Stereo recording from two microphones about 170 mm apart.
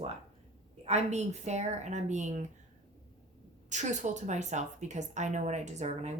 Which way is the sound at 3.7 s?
45° right (ahead or behind).